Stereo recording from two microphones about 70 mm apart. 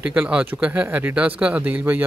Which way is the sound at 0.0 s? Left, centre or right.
Centre.